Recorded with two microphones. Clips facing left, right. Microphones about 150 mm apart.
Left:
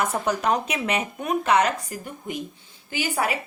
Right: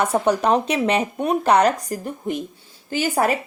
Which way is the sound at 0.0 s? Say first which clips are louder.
Right 5 dB; 30° right (ahead or behind).